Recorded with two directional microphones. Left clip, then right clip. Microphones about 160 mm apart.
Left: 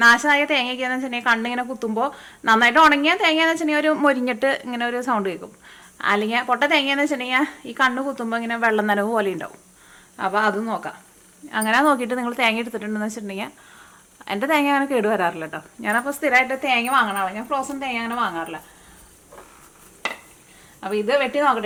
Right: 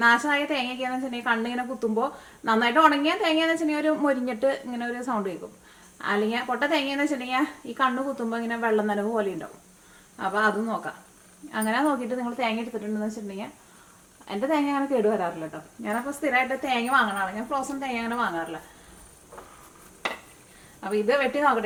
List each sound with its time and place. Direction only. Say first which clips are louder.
0.0 s a woman's voice: left 6 dB; 20° left (ahead or behind)
16.2 s a woman's voice: left 5 dB; 25° left (ahead or behind)
20.8 s a woman's voice: left 3 dB; 15° left (ahead or behind)